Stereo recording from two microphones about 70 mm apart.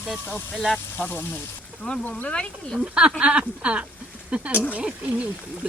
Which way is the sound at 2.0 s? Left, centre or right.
Centre.